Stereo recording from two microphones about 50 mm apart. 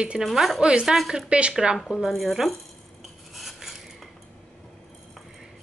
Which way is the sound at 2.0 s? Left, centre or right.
Centre.